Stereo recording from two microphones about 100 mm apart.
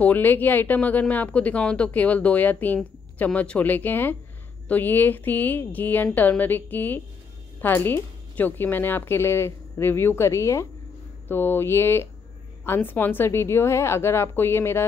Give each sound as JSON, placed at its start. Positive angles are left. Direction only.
{"t": 0.0, "sound": "a woman's voice", "side_deg": 20}